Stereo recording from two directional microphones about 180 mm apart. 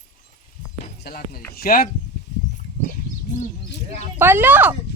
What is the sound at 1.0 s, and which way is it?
Speech, 55° left (ahead or behind).